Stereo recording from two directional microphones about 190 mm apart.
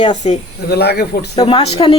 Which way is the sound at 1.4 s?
25° left (ahead or behind).